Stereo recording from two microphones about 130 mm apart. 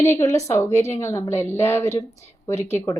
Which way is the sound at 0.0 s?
20° left (ahead or behind).